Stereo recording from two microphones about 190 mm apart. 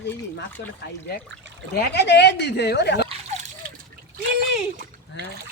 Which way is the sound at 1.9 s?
65° left (ahead or behind).